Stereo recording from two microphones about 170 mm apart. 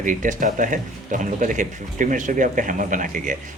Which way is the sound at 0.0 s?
50° right (ahead or behind).